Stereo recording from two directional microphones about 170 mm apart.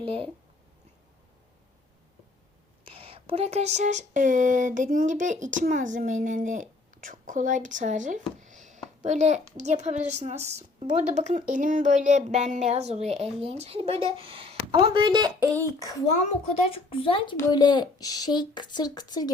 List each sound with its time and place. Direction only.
0.0 s a woman's voice: 35° right (ahead or behind)
2.8 s a woman's voice: 30° right (ahead or behind)
16.6 s speech: 30° left (ahead or behind)